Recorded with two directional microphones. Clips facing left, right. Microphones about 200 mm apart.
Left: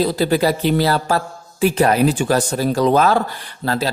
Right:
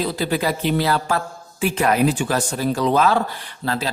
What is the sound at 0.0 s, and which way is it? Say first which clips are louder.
Mantra: left 5 dB; 35° left (ahead or behind).